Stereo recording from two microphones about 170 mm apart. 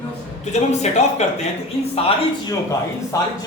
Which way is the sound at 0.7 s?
40° left (ahead or behind).